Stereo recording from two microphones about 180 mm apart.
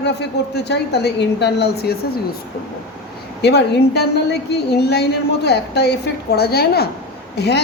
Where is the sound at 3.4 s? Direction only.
65° left (ahead or behind).